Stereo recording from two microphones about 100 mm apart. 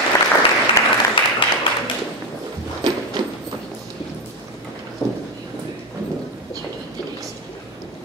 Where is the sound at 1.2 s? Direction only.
60° left (ahead or behind).